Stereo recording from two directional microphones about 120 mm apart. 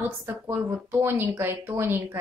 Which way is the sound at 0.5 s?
20° right (ahead or behind).